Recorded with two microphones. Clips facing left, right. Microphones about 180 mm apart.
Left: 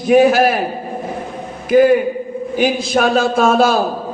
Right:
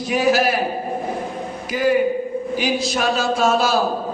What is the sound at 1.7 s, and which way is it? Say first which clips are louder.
Speech: left 11 dB; 55° left (ahead or behind).